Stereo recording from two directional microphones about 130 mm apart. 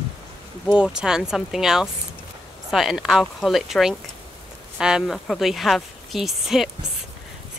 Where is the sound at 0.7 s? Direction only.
5° right (ahead or behind).